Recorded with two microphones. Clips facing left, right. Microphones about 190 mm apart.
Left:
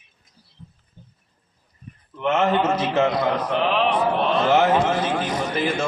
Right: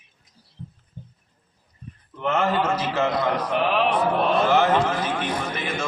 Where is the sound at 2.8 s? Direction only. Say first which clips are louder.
Left 3 dB; 20° left (ahead or behind).